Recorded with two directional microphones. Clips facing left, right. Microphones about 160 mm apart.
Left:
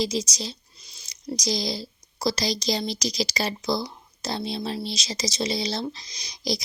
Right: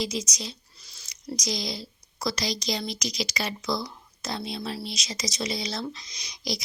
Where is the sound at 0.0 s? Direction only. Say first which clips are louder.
Left 4 dB; 30° left (ahead or behind).